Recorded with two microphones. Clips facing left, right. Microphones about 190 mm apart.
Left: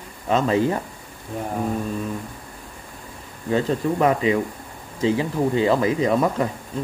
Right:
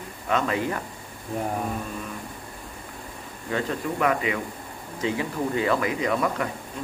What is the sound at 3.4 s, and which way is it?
A man's voice, 30° left (ahead or behind).